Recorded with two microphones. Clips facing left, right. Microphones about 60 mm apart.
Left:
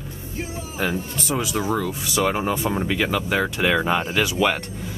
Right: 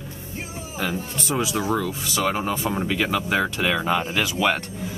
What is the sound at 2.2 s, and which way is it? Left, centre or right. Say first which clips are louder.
Speech: even; centre.